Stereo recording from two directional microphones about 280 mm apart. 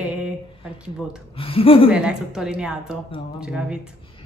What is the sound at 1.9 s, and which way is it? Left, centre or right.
A woman's voice, centre.